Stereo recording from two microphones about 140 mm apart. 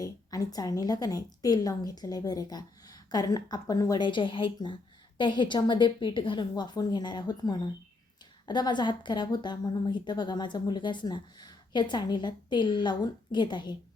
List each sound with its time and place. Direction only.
0.0 s a woman's voice: 25° left (ahead or behind)